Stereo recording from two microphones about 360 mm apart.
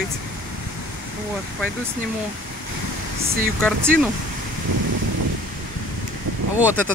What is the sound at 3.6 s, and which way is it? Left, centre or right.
Speech, centre.